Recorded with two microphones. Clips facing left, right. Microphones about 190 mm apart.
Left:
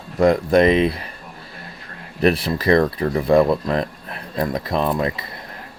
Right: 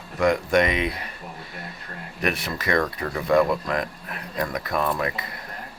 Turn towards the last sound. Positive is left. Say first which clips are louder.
# left 4 dB
turn(degrees=25)  # may be behind; listen again after turning